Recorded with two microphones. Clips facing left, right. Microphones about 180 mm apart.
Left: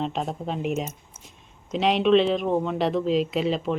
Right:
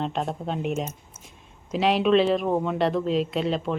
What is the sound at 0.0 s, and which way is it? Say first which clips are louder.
Speech: even; centre (ahead or behind).